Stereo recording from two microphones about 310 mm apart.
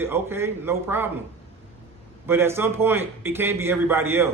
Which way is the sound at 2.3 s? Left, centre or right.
Centre.